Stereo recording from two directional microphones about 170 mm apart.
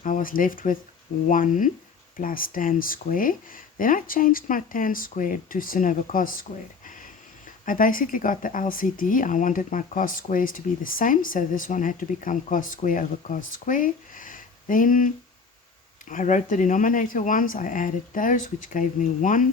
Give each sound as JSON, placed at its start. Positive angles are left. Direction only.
{"t": 0.0, "sound": "speech", "side_deg": 55}
{"t": 6.8, "sound": "a sound", "side_deg": 50}
{"t": 7.6, "sound": "speech", "side_deg": 50}